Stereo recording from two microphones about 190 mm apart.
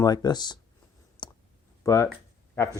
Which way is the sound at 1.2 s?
25° left (ahead or behind).